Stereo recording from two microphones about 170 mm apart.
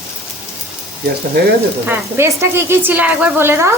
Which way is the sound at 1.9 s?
15° right (ahead or behind).